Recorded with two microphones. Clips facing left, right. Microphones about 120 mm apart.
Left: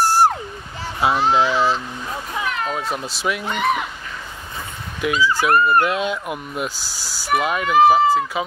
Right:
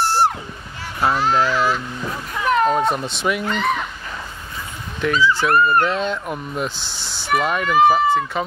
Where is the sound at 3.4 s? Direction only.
15° left (ahead or behind).